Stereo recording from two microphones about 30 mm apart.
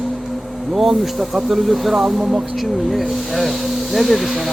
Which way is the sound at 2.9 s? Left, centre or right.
Centre.